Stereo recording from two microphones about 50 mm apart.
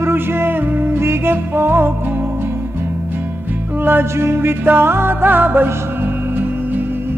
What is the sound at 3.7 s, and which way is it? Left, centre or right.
Music, right.